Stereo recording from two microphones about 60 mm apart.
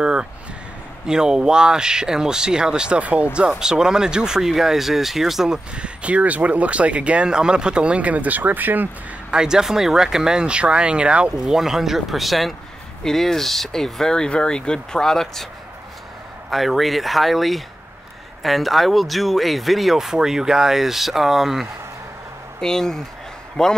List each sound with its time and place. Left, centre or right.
0.0 s a sound: centre
1.0 s speech: centre
5.8 s speech: right
9.3 s speech: centre
11.4 s speech: centre
16.4 s speech: centre
22.6 s a man's voice: centre